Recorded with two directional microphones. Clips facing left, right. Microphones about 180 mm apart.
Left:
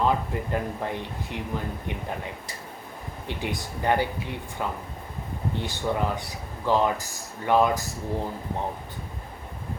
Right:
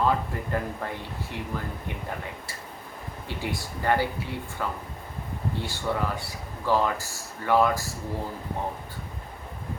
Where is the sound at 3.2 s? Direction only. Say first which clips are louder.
Left 1 dB; 20° left (ahead or behind).